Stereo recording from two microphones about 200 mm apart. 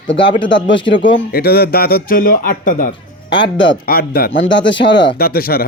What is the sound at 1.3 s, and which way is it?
Speech, 50° left (ahead or behind).